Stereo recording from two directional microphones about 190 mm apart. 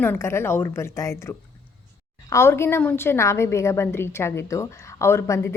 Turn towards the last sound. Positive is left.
turn(degrees=15)  # may be behind; listen again after turning